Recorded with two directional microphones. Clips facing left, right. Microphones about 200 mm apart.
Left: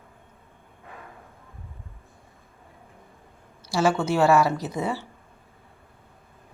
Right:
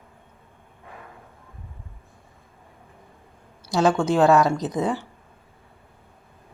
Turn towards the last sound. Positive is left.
turn(degrees=-15)  # may be behind; listen again after turning